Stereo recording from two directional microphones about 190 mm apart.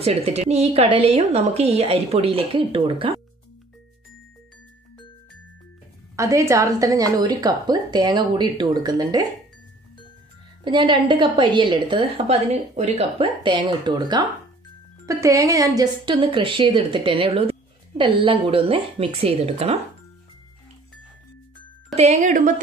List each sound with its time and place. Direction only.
0.0 s a woman's voice: 30° right (ahead or behind)
6.1 s a woman's voice: 15° right (ahead or behind)
10.6 s a woman's voice: 25° right (ahead or behind)
21.9 s a woman's voice: 35° right (ahead or behind)